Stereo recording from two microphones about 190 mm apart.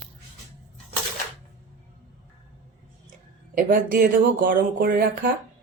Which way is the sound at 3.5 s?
50° right (ahead or behind).